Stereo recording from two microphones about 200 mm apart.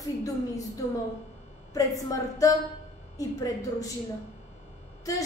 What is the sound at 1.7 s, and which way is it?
Speech, 15° left (ahead or behind).